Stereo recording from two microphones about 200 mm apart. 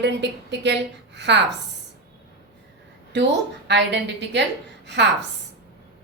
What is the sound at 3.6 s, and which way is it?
A woman's voice, 60° right (ahead or behind).